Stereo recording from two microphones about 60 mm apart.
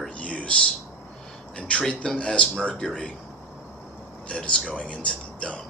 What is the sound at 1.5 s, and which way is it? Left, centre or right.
Speech, centre.